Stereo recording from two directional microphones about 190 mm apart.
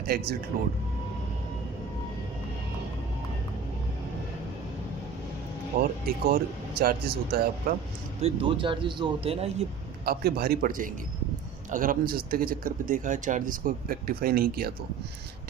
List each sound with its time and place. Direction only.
0.1 s speech: 50° right (ahead or behind)
5.7 s speech: 50° right (ahead or behind)
8.2 s speech: 30° right (ahead or behind)
10.1 s speech: 55° right (ahead or behind)